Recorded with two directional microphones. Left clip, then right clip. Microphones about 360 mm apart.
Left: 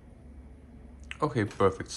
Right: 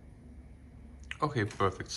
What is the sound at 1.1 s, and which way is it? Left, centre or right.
Speech, centre.